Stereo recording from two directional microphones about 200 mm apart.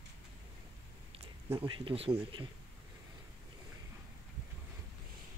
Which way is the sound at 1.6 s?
25° right (ahead or behind).